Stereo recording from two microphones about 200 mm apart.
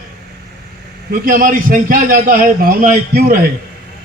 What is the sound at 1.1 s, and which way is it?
A man's voice, 50° right (ahead or behind).